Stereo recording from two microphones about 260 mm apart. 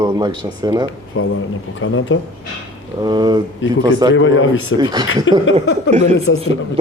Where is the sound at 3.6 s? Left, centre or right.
Left.